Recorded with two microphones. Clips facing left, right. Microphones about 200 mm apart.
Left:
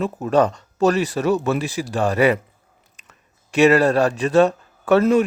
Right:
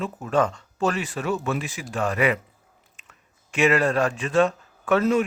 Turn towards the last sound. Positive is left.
turn(degrees=35)  # may be behind; listen again after turning